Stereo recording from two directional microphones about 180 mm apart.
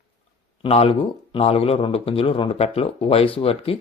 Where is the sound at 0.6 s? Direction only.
30° left (ahead or behind).